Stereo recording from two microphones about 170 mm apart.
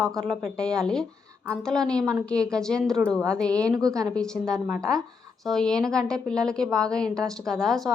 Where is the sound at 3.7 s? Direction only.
20° right (ahead or behind).